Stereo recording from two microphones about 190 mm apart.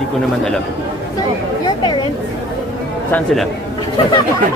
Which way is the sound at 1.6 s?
20° left (ahead or behind).